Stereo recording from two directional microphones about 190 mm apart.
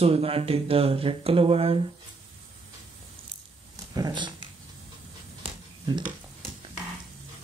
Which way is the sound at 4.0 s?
20° right (ahead or behind).